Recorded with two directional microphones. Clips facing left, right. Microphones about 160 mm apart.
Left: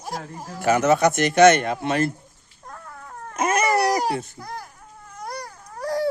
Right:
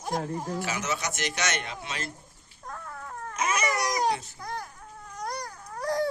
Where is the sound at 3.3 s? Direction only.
55° left (ahead or behind).